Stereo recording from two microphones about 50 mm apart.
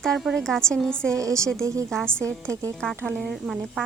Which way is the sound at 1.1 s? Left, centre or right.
Right.